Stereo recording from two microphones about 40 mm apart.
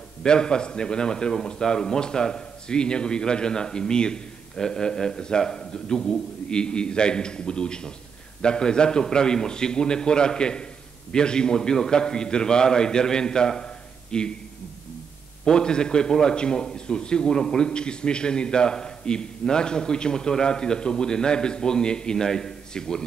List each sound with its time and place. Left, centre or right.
0.2 s a man's voice: centre
15.4 s a man's voice: centre
17.6 s a man's voice: left